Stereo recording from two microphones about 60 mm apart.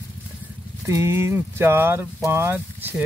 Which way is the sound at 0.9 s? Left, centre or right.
Right.